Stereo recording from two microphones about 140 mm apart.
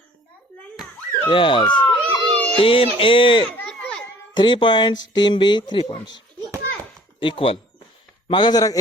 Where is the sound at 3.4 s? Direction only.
10° left (ahead or behind).